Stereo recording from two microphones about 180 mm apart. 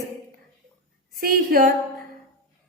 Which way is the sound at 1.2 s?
55° right (ahead or behind).